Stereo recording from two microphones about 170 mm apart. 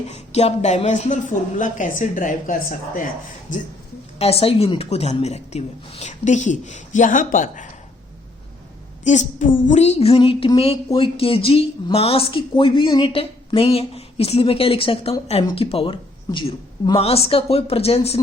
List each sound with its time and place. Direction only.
0.1 s speech: 40° left (ahead or behind)
4.2 s speech: 35° left (ahead or behind)
9.0 s speech: 50° left (ahead or behind)